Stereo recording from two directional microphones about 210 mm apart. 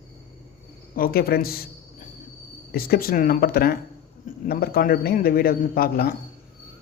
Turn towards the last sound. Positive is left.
turn(degrees=45)  # may be behind; listen again after turning